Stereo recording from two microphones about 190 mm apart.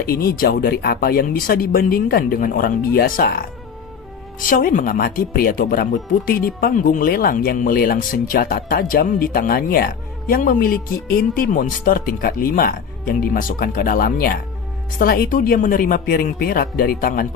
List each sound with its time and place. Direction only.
0.0 s speech: 50° left (ahead or behind)